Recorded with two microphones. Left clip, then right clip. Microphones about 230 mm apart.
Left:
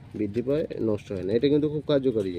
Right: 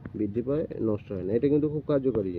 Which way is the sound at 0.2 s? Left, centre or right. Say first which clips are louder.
Left 2 dB; centre.